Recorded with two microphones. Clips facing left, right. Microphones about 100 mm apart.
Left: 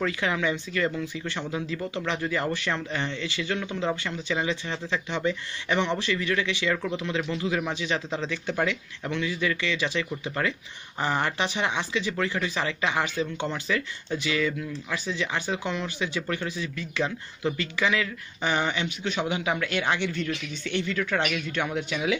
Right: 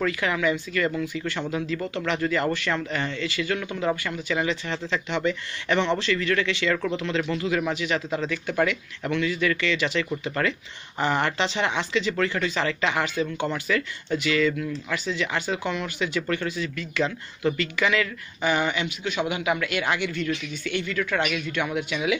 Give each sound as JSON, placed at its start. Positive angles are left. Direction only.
{"t": 0.0, "sound": "speech", "side_deg": 25}